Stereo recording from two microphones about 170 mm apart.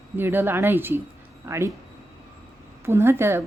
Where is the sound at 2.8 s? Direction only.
15° right (ahead or behind).